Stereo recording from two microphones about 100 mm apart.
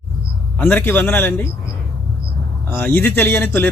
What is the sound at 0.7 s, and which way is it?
Speech, 20° left (ahead or behind).